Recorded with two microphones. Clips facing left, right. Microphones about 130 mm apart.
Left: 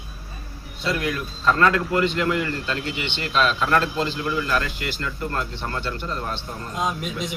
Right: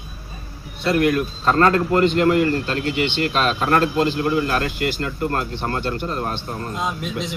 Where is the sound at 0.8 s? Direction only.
55° right (ahead or behind).